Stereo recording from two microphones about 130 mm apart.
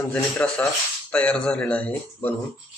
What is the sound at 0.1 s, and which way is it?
Speech, 10° left (ahead or behind).